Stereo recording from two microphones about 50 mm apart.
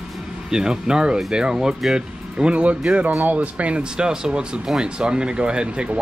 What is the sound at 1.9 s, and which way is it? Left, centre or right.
Speech, right.